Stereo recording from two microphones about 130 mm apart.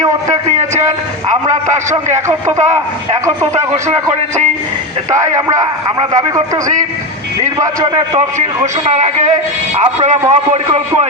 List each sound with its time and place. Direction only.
1.5 s a man's voice: 70° right (ahead or behind)
5.1 s speech: 25° right (ahead or behind)
7.3 s speech: 25° right (ahead or behind)
8.4 s a man's voice: 65° right (ahead or behind)